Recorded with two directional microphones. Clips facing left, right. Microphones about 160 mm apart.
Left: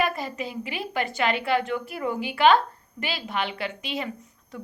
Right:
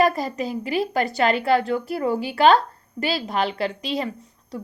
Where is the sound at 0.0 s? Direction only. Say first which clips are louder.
Right 6 dB; 40° right (ahead or behind).